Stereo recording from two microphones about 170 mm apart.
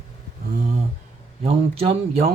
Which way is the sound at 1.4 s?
35° right (ahead or behind).